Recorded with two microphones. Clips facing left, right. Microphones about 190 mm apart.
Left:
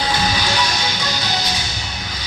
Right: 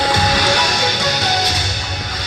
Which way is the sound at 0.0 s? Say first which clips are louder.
Right 4 dB; 70° right (ahead or behind).